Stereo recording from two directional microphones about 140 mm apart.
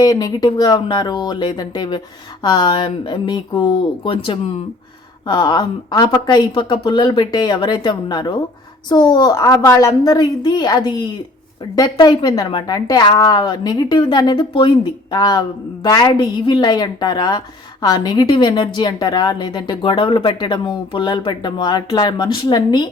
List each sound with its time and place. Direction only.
0.0 s a woman's voice: 25° left (ahead or behind)